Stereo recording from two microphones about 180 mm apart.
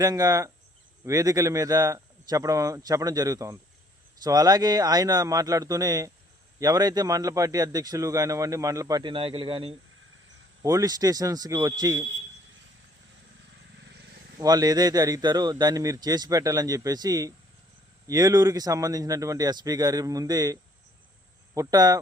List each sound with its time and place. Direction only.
0.0 s a man's voice: 20° right (ahead or behind)
10.6 s a man's voice: 20° right (ahead or behind)
13.7 s vehicle: 75° right (ahead or behind)
14.3 s a man's voice: 20° right (ahead or behind)